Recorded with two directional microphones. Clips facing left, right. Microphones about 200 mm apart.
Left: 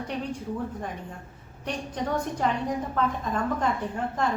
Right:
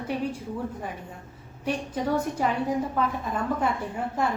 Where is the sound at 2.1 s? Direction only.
5° right (ahead or behind).